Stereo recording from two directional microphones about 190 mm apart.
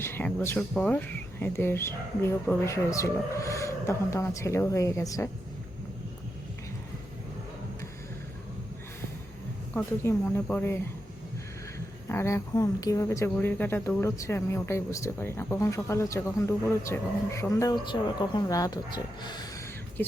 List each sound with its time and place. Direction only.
0.0 s a woman's voice: 10° left (ahead or behind)
9.7 s a woman's voice: 10° left (ahead or behind)
12.0 s a woman's voice: 15° left (ahead or behind)
20.0 s a woman's voice: 10° left (ahead or behind)